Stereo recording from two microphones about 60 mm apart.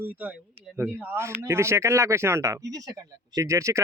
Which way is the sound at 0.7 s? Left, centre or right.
Right.